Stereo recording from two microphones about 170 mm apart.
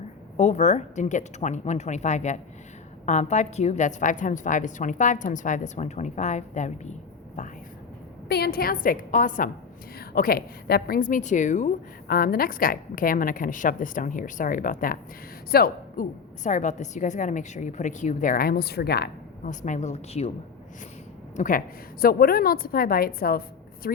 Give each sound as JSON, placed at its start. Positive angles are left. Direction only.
{"t": 0.3, "sound": "a woman's voice", "side_deg": 40}
{"t": 8.3, "sound": "a woman's voice", "side_deg": 65}
{"t": 10.0, "sound": "a woman's voice", "side_deg": 60}
{"t": 19.5, "sound": "a woman's voice", "side_deg": 45}
{"t": 21.3, "sound": "a woman's voice", "side_deg": 50}